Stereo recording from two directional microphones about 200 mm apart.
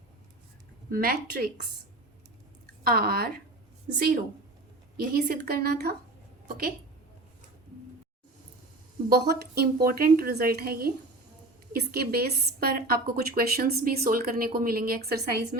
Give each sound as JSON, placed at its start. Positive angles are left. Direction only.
{"t": 0.9, "sound": "a woman's voice", "side_deg": -45}
{"t": 2.8, "sound": "a woman's voice", "side_deg": -50}
{"t": 9.0, "sound": "a woman's voice", "side_deg": -50}